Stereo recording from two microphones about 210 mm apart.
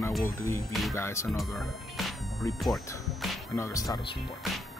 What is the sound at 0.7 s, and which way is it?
Speech, centre (ahead or behind).